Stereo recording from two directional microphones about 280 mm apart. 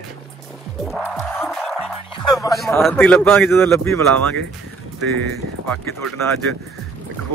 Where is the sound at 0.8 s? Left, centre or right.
Centre.